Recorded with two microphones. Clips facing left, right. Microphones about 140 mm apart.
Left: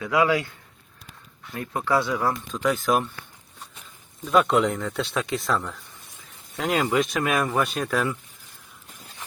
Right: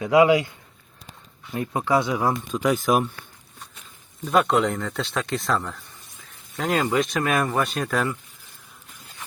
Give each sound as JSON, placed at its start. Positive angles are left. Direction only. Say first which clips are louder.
{"t": 0.0, "sound": "a man's voice", "louder": "right 5 dB", "side_deg": -20}
{"t": 1.5, "sound": "speech", "louder": "right 2 dB", "side_deg": -20}
{"t": 4.4, "sound": "speech", "louder": "even", "side_deg": 0}
{"t": 6.6, "sound": "speech", "louder": "even", "side_deg": 0}